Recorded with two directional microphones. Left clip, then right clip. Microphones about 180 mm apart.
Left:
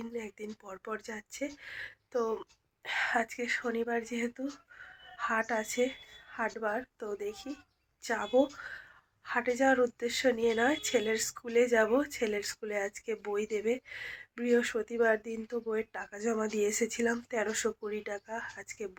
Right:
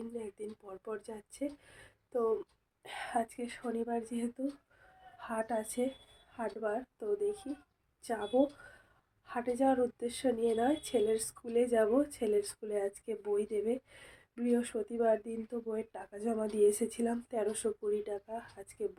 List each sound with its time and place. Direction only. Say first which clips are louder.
0.0 s a woman's voice: left 2 dB; centre (ahead or behind)